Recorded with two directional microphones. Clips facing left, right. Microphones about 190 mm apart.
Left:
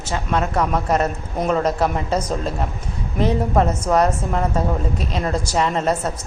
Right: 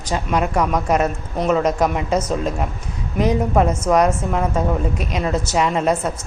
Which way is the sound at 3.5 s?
5° right (ahead or behind).